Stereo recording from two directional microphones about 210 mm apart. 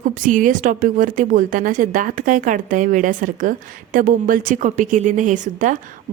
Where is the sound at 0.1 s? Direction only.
40° right (ahead or behind).